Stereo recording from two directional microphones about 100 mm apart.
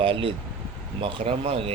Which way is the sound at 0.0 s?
60° right (ahead or behind).